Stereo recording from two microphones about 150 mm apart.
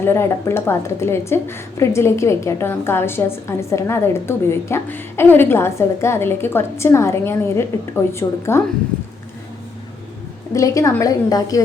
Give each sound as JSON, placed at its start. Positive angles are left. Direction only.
{"t": 0.0, "sound": "a woman's voice", "side_deg": 15}
{"t": 10.5, "sound": "a woman's voice", "side_deg": 20}